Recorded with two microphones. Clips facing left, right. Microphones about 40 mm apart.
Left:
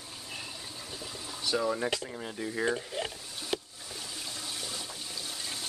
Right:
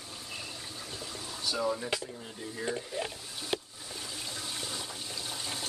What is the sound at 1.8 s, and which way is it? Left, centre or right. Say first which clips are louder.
Speech: left 3 dB; left.